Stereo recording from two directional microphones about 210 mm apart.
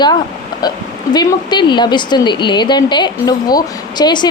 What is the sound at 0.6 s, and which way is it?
Speech, 20° left (ahead or behind).